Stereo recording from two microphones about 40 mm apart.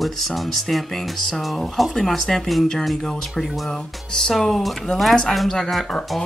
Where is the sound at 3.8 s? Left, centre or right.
Centre.